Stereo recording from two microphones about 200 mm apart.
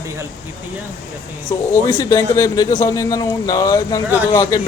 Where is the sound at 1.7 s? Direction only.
15° left (ahead or behind).